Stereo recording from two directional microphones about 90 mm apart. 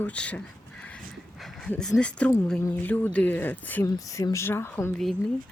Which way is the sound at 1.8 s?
10° left (ahead or behind).